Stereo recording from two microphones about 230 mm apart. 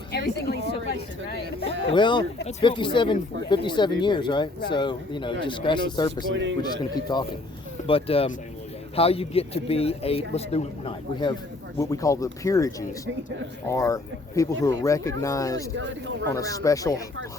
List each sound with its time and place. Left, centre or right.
0.1 s speech: left
1.9 s speech: left
6.3 s speech: right
6.6 s speech: centre